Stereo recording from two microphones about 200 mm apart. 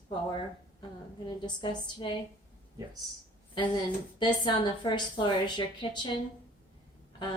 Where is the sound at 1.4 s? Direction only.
20° left (ahead or behind).